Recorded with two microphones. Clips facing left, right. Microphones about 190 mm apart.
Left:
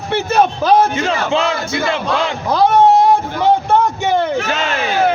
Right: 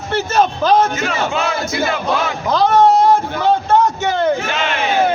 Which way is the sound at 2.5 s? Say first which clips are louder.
Left 1 dB; 10° left (ahead or behind).